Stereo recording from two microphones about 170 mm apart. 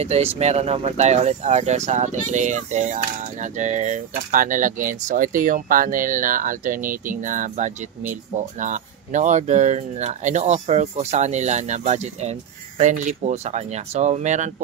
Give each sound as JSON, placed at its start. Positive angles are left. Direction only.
{"t": 0.0, "sound": "speech", "side_deg": -40}